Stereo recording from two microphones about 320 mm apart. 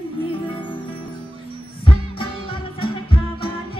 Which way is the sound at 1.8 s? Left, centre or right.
Centre.